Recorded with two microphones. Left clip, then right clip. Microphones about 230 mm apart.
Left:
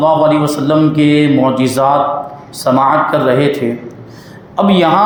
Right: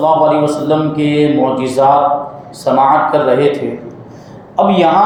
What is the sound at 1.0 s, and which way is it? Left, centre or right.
A man's voice, left.